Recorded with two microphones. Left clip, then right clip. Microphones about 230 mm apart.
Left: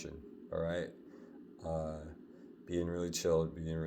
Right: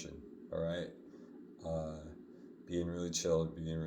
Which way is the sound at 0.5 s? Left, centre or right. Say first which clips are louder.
Left 2 dB; left.